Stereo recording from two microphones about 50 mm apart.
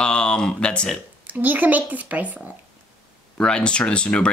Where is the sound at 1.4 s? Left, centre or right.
Right.